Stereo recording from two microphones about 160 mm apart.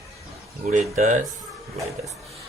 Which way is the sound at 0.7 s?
50° right (ahead or behind).